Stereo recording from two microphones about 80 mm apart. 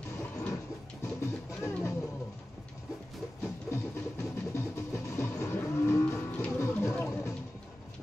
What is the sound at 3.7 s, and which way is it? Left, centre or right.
Music, left.